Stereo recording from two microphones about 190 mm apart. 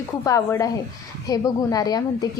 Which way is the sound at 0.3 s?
15° left (ahead or behind).